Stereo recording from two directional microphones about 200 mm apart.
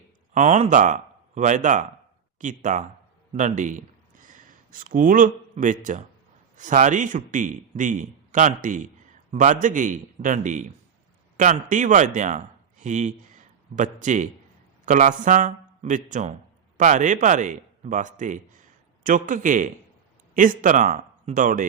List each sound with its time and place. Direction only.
0.3 s a man's voice: 35° right (ahead or behind)